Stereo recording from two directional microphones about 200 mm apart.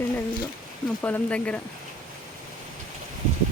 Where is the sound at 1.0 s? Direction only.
5° left (ahead or behind).